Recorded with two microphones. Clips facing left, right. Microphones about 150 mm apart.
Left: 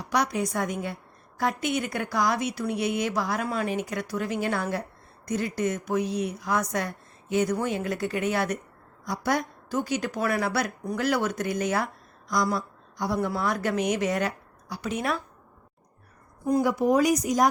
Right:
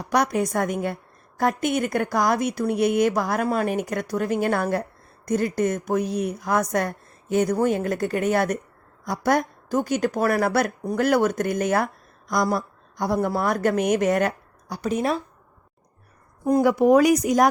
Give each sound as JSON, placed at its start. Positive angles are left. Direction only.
{"t": 0.0, "sound": "a woman's voice", "side_deg": -50}
{"t": 16.5, "sound": "speech", "side_deg": -55}